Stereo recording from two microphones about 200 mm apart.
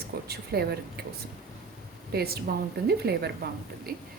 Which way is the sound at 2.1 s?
50° right (ahead or behind).